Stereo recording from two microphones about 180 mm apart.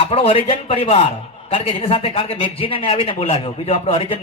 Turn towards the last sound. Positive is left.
turn(degrees=30)  # may be behind; listen again after turning